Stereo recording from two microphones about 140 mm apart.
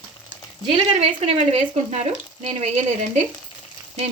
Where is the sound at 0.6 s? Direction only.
45° right (ahead or behind).